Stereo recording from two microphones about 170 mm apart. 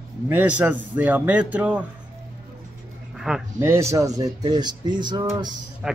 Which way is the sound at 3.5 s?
15° right (ahead or behind).